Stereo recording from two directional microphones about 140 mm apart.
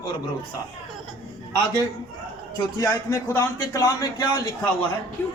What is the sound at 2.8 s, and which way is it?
Speech, 20° left (ahead or behind).